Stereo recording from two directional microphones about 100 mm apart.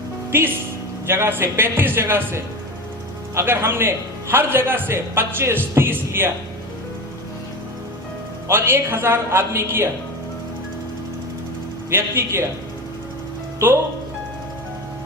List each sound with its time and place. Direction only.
0.3 s a woman's voice: 25° right (ahead or behind)
8.4 s a man's voice: 25° right (ahead or behind)
11.9 s a man's voice: 25° right (ahead or behind)
13.6 s a man's voice: 25° right (ahead or behind)